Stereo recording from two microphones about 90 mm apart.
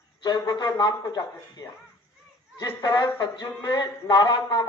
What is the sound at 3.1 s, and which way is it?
A man's voice, 55° left (ahead or behind).